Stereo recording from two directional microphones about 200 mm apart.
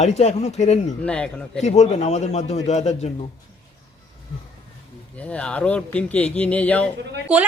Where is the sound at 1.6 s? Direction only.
35° left (ahead or behind).